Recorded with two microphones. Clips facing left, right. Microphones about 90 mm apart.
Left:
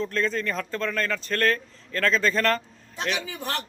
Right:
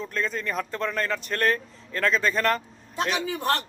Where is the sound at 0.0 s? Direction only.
10° right (ahead or behind).